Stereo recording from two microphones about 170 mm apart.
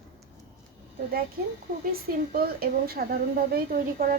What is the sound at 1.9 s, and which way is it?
A woman's voice, 65° right (ahead or behind).